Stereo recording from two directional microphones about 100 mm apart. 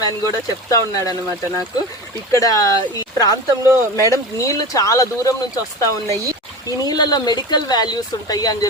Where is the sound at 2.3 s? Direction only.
35° left (ahead or behind).